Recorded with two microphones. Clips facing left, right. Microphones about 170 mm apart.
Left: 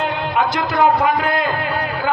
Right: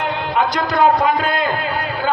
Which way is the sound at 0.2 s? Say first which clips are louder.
Even; 25° left (ahead or behind).